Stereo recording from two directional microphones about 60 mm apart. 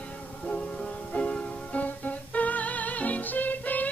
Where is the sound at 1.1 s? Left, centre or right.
Left.